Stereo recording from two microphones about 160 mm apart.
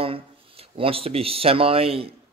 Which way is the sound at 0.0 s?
35° right (ahead or behind).